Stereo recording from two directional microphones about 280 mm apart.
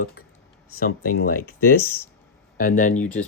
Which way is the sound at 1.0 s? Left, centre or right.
Left.